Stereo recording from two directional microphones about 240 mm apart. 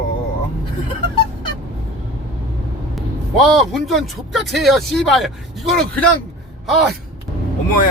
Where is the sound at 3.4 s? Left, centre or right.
Centre.